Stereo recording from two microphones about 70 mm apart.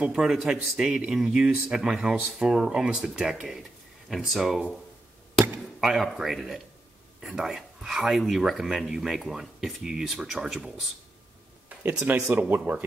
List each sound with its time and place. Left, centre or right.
0.0 s speech: centre
5.8 s speech: centre
11.7 s a sound: right
12.4 s speech: right